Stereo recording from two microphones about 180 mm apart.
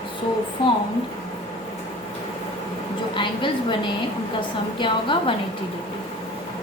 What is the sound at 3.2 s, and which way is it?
A woman's voice, 25° left (ahead or behind).